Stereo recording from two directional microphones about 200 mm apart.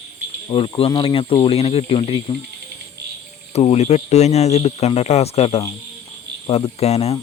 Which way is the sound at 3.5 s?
30° left (ahead or behind).